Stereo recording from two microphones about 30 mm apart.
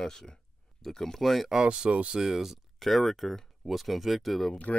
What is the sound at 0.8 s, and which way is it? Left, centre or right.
Speech, centre.